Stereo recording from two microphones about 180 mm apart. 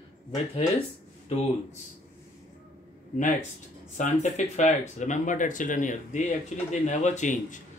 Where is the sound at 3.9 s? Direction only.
40° left (ahead or behind).